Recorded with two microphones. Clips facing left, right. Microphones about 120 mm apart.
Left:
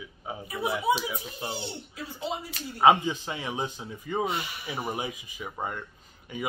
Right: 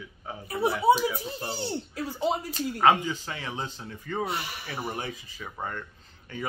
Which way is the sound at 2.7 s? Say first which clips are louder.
Left 2 dB; 15° left (ahead or behind).